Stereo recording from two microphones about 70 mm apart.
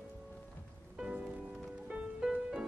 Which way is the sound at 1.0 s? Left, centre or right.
Centre.